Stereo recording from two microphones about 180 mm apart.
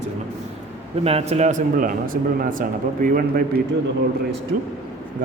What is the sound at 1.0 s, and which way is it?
A man's voice, 35° right (ahead or behind).